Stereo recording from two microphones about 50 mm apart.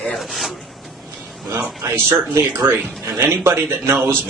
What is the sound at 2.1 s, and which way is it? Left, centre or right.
A man's voice, right.